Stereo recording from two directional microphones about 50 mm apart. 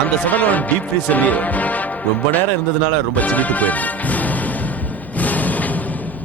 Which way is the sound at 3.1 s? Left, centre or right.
Left.